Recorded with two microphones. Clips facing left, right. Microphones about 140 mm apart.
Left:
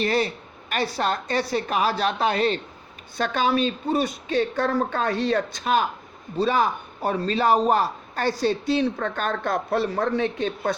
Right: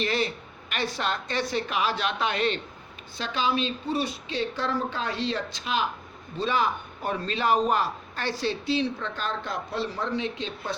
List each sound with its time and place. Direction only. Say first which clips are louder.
0.0 s a woman's voice: left 4 dB; 40° left (ahead or behind)
3.2 s a man's voice: left 5 dB; 50° left (ahead or behind)